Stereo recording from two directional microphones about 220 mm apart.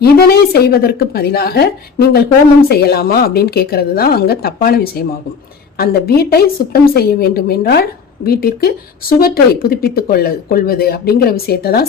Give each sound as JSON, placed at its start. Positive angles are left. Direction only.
{"t": 0.0, "sound": "a woman's voice", "side_deg": 45}